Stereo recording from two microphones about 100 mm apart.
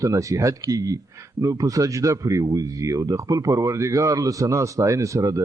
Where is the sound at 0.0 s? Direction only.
35° right (ahead or behind).